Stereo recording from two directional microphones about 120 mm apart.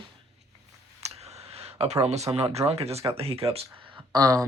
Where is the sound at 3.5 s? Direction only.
50° right (ahead or behind).